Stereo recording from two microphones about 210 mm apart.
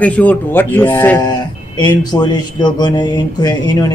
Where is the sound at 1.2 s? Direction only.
20° left (ahead or behind).